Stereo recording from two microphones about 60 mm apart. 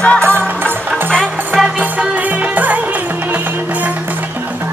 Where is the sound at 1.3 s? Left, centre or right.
Centre.